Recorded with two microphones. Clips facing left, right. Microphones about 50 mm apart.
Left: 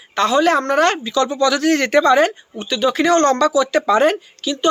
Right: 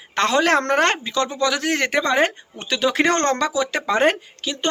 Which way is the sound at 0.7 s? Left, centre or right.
Right.